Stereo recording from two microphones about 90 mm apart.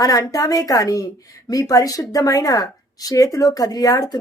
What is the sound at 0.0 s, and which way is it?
A woman's voice, 45° left (ahead or behind).